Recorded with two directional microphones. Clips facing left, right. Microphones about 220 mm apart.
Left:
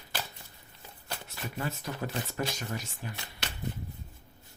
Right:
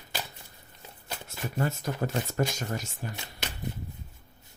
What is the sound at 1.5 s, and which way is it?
Speech, 45° right (ahead or behind).